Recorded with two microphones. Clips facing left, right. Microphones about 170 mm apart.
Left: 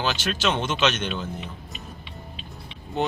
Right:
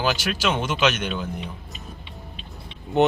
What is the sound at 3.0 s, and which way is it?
Speech, 65° right (ahead or behind).